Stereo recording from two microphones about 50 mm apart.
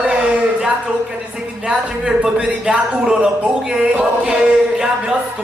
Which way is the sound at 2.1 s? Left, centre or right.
Centre.